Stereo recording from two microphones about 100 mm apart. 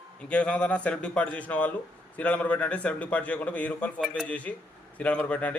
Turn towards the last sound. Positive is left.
turn(degrees=15)  # may be behind; listen again after turning